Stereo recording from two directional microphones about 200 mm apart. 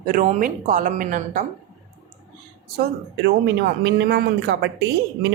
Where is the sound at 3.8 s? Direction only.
55° right (ahead or behind).